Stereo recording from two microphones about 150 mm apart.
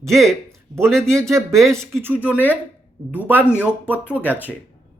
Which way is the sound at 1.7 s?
15° right (ahead or behind).